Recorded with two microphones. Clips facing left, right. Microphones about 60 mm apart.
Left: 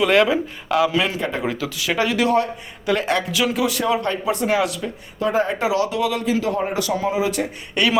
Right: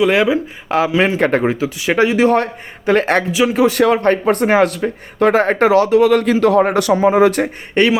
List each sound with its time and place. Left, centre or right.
0.0 s speech: centre
0.7 s speech: right
1.2 s speech: right
1.5 s speech: right
2.3 s speech: right
3.8 s speech: right
5.2 s speech: right
7.1 s speech: right